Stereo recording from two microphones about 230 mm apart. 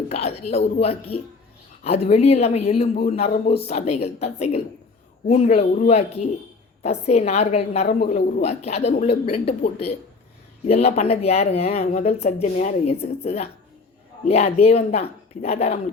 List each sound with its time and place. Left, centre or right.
0.1 s a woman's voice: left